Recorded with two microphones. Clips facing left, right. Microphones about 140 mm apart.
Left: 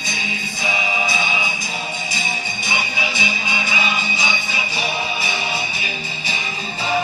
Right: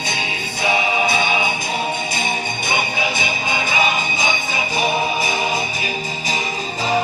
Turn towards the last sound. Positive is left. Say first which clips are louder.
# right 4 dB
turn(degrees=-45)  # may be behind; listen again after turning